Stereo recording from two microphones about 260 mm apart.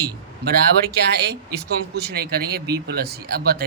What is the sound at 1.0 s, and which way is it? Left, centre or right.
Speech, right.